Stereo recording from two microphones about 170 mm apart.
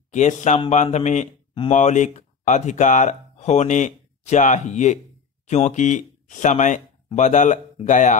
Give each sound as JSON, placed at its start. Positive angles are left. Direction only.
{"t": 0.1, "sound": "speech", "side_deg": 45}